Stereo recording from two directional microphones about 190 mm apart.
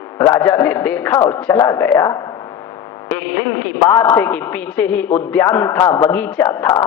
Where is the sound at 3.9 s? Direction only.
10° left (ahead or behind).